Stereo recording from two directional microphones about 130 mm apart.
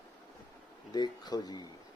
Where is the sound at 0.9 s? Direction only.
30° left (ahead or behind).